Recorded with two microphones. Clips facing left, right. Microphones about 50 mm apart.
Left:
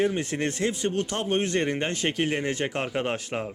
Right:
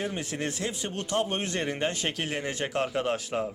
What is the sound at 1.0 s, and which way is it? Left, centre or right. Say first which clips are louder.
Speech: even; centre.